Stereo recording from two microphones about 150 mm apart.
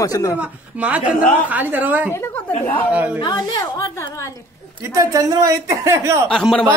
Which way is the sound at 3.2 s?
25° left (ahead or behind).